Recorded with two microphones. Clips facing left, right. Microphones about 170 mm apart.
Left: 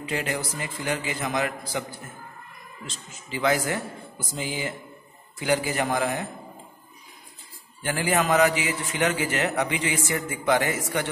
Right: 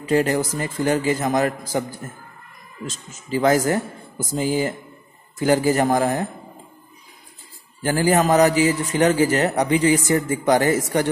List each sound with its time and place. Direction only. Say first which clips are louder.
0.0 s a man's voice: right 10 dB; 40° right (ahead or behind)
7.8 s a man's voice: right 7 dB; 40° right (ahead or behind)